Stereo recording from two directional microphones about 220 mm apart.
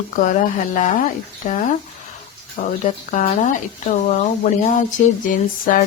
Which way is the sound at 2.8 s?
35° left (ahead or behind).